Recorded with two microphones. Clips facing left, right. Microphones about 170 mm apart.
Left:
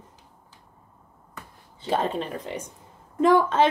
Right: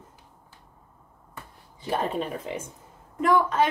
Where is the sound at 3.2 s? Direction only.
25° left (ahead or behind).